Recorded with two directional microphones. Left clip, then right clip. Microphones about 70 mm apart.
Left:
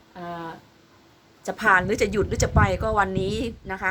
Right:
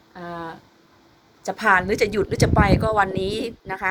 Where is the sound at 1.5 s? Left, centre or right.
Right.